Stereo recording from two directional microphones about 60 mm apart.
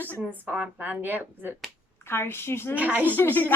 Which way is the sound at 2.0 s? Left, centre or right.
Left.